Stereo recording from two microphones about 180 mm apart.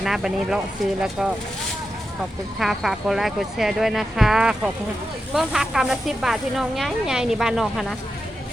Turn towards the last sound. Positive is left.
turn(degrees=0)  # may be behind; listen again after turning